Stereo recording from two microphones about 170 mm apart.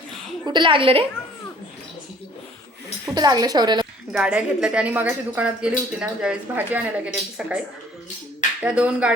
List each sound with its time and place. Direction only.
0.4 s a woman's voice: 25° right (ahead or behind)
3.2 s a woman's voice: 25° right (ahead or behind)
4.1 s speech: 5° right (ahead or behind)
8.6 s speech: 5° right (ahead or behind)